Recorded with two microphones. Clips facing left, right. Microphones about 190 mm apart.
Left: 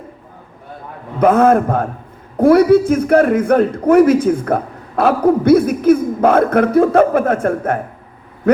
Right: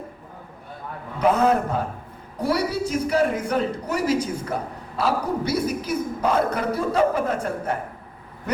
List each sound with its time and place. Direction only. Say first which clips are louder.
1.2 s a man's voice: left 8 dB; 50° left (ahead or behind)